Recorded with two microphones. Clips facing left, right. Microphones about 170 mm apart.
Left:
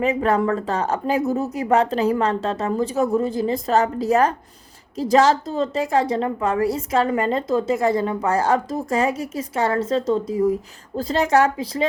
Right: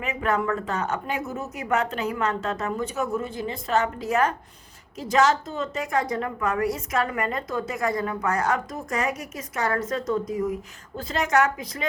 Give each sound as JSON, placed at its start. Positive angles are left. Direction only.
{"t": 0.0, "sound": "a woman's voice", "side_deg": 35}